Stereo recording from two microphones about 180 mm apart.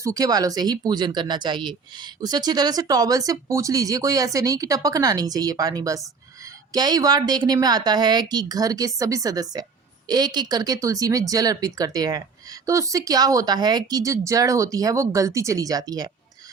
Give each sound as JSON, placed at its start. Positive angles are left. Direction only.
{"t": 0.0, "sound": "speech", "side_deg": -20}